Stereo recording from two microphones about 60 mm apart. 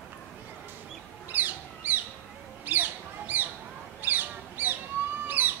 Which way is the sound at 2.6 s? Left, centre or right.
Right.